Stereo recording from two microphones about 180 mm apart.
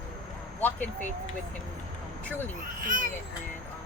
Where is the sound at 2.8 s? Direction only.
50° right (ahead or behind).